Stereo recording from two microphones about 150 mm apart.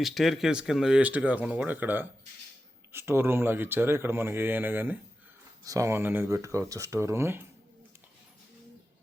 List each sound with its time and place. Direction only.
0.0 s speech: centre (ahead or behind); by 7.4 s 15° right (ahead or behind)